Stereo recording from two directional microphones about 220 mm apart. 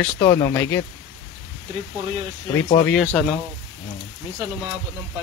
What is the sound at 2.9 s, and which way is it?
Speech, centre (ahead or behind).